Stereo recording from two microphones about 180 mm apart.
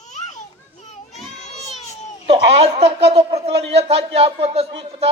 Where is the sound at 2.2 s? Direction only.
35° right (ahead or behind).